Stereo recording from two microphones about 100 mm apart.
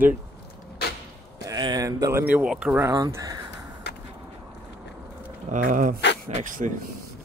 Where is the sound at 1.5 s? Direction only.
40° right (ahead or behind).